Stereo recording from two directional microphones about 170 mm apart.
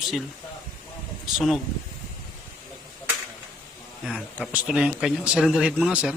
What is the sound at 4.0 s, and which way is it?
Speech, 5° right (ahead or behind).